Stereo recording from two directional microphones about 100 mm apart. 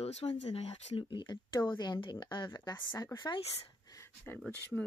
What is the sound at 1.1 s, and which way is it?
Speech, 50° left (ahead or behind).